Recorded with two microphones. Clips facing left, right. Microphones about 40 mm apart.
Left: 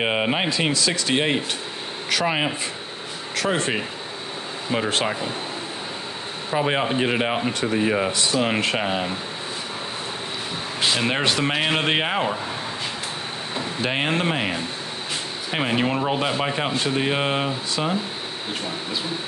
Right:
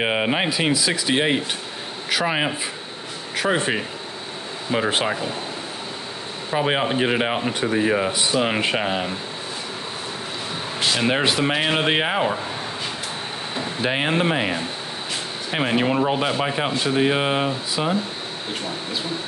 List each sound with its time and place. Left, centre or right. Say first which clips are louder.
0.0 s speech: right 1 dB; centre
3.3 s speech: right 2 dB; centre
6.5 s speech: right 1 dB; centre
8.1 s speech: right 1 dB; centre
8.7 s speech: right 1 dB; centre
11.0 s speech: right 4 dB; centre
13.6 s speech: right 1 dB; centre